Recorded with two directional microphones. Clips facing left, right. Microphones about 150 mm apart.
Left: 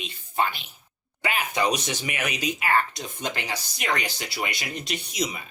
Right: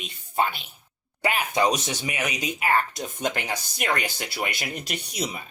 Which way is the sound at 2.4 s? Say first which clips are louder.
Even; 50° right (ahead or behind).